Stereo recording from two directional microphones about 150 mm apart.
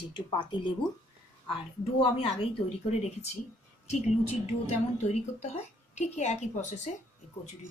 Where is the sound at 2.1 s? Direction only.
40° left (ahead or behind).